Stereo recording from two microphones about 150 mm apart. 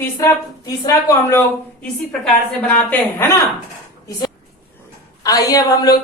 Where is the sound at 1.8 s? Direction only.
10° left (ahead or behind).